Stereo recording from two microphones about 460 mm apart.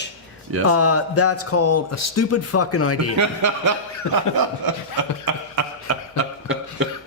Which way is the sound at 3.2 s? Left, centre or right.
Right.